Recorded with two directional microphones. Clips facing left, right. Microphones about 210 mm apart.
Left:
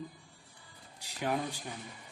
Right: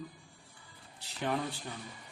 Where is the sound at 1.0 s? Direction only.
10° left (ahead or behind).